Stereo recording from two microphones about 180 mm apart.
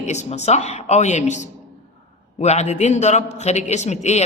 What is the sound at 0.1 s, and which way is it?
A man's voice, 40° left (ahead or behind).